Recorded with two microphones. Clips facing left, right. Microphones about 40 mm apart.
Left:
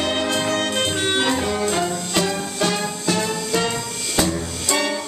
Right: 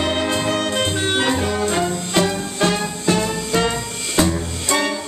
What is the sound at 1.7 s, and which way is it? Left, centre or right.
Music, centre.